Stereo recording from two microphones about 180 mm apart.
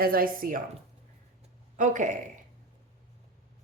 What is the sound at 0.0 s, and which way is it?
Speech, 55° right (ahead or behind).